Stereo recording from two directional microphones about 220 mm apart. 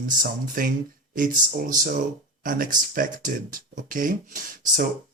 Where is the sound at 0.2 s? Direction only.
40° right (ahead or behind).